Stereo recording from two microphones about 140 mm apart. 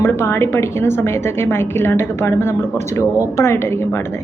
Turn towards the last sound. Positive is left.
turn(degrees=20)  # may be behind; listen again after turning